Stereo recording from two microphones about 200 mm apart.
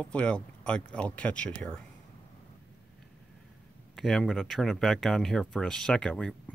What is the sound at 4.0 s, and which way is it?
Speech, centre (ahead or behind).